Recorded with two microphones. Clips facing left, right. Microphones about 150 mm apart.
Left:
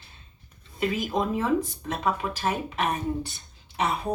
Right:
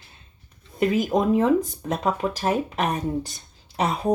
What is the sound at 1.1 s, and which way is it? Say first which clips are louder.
Speech: right 5 dB; 45° right (ahead or behind).